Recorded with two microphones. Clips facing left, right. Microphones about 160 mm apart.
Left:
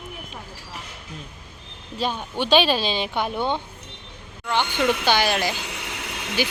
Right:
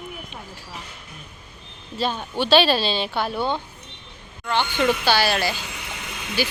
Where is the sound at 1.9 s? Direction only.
10° left (ahead or behind).